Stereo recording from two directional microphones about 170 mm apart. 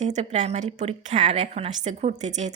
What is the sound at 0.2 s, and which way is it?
A woman's voice, 40° right (ahead or behind).